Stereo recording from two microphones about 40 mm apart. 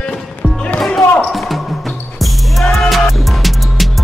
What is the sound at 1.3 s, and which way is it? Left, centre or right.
Music, centre.